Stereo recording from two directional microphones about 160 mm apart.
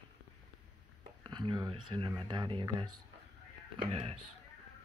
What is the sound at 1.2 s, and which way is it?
Speech, 30° right (ahead or behind).